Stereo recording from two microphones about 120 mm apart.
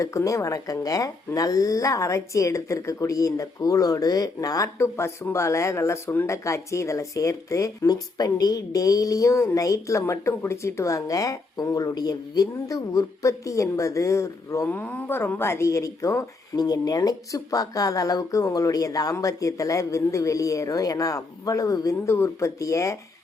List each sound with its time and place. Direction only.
0.0 s speech: 25° left (ahead or behind)
14.7 s speech: 15° left (ahead or behind)